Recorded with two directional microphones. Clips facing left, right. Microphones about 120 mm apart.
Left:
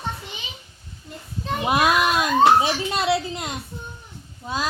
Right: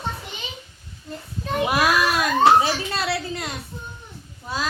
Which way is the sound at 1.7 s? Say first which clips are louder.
Left 2 dB; 20° left (ahead or behind).